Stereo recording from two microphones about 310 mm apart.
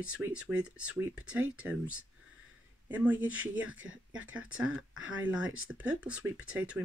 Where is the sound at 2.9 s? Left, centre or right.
Centre.